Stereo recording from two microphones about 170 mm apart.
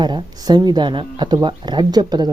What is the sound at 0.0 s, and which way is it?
Speech, 25° right (ahead or behind).